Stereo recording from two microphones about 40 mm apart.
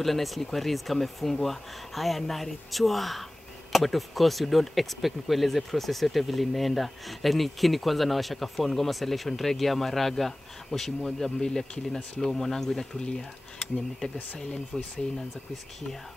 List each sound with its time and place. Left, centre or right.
0.0 s speech: centre
14.0 s speech: left
14.7 s speech: centre